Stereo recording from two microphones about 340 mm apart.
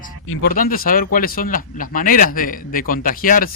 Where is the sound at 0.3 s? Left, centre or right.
Left.